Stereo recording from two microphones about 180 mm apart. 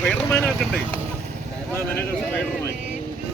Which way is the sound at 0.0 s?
5° left (ahead or behind).